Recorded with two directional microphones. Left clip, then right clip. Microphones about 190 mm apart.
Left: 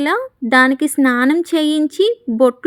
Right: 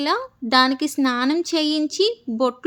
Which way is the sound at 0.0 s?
30° left (ahead or behind).